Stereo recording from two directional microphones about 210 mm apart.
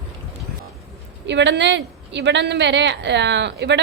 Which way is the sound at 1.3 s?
55° right (ahead or behind).